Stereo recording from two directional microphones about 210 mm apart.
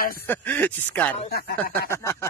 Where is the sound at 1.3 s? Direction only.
50° left (ahead or behind).